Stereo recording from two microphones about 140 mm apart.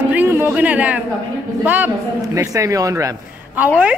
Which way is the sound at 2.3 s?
20° right (ahead or behind).